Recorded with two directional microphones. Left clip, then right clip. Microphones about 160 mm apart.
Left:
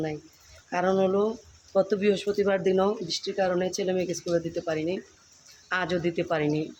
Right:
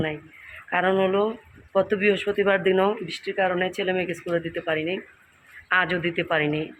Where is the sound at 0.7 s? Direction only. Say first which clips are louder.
Right 3 dB; 10° left (ahead or behind).